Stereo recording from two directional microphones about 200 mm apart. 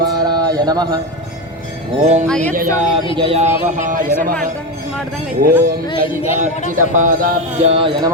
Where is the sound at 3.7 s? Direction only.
40° right (ahead or behind).